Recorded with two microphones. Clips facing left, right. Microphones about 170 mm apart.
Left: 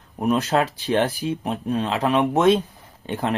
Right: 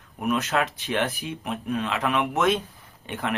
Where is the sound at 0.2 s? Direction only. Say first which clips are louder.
Left 4 dB; 35° left (ahead or behind).